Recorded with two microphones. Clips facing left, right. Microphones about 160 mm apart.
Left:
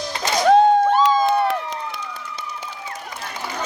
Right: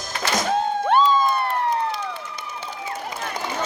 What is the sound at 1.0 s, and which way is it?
Crowd, 85° left.